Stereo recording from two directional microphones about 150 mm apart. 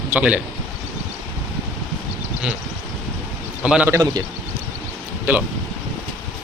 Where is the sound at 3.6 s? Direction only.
5° right (ahead or behind).